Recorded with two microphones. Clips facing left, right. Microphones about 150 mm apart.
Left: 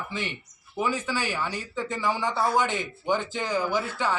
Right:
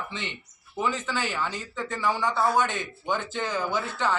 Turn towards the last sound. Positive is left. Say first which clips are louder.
# left 1 dB
turn(degrees=15)  # may be behind; listen again after turning